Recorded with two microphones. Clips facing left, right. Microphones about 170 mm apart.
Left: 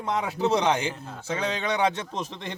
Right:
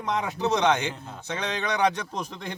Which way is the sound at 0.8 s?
5° left (ahead or behind).